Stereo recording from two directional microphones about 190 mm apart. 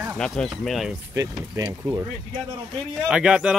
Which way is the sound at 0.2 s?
Centre (ahead or behind).